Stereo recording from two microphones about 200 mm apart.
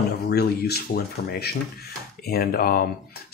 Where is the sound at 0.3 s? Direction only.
55° left (ahead or behind).